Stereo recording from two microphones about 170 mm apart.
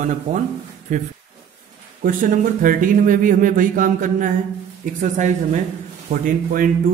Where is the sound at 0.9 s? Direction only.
45° right (ahead or behind).